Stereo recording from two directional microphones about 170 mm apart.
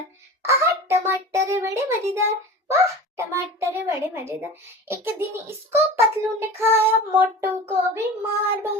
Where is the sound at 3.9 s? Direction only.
15° right (ahead or behind).